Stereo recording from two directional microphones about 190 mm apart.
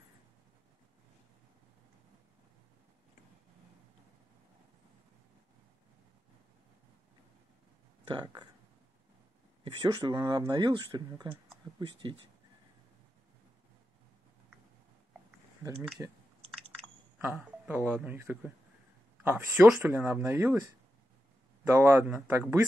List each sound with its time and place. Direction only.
8.1 s speech: 25° right (ahead or behind)
9.8 s speech: 25° right (ahead or behind)
16.0 s speech: 10° right (ahead or behind)
17.2 s speech: 10° right (ahead or behind)
21.6 s speech: 15° right (ahead or behind)